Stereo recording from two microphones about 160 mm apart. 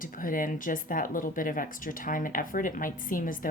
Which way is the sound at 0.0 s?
60° left (ahead or behind).